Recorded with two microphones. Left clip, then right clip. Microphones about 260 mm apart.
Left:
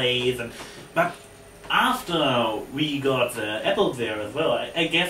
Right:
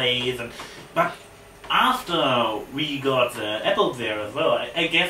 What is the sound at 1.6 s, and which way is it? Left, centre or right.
Speech, centre.